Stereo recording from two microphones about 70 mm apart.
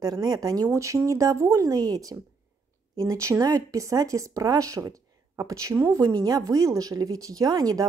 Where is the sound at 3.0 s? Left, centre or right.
Right.